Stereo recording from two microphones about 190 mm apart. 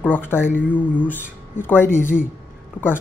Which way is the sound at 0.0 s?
10° left (ahead or behind).